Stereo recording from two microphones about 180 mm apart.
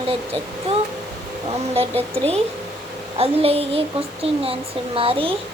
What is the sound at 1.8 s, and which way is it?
Speech, 35° right (ahead or behind).